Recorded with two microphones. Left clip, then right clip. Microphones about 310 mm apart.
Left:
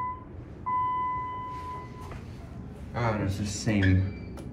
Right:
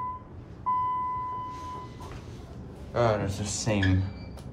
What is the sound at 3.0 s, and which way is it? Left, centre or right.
Speech, centre.